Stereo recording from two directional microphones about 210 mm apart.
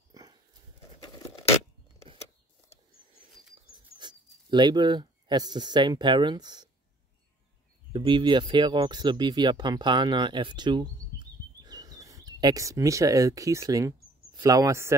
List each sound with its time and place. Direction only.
0.1 s horse: 20° right (ahead or behind)
1.0 s a sound: 15° left (ahead or behind)
4.0 s speech: 20° right (ahead or behind)
7.9 s speech: 20° right (ahead or behind)